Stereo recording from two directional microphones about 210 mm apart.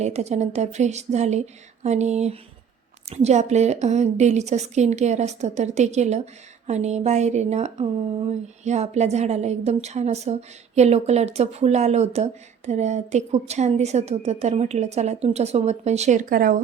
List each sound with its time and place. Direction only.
0.0 s speech: 30° right (ahead or behind)